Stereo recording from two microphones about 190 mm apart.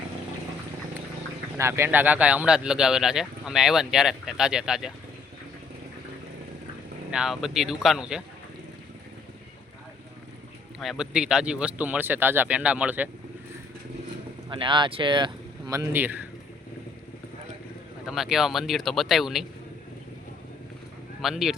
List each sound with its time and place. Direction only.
1.5 s speech: 15° right (ahead or behind)
7.1 s speech: 5° right (ahead or behind)
10.8 s speech: centre (ahead or behind)
14.5 s speech: 25° right (ahead or behind); by 16.2 s 10° right (ahead or behind)
18.0 s speech: centre (ahead or behind)
21.2 s speech: centre (ahead or behind)